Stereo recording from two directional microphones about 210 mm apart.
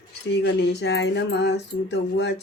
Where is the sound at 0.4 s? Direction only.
55° left (ahead or behind).